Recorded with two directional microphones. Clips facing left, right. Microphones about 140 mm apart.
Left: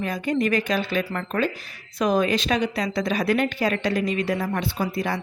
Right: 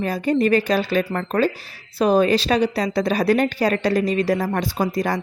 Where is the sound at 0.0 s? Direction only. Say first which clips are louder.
Right 4 dB; 35° right (ahead or behind).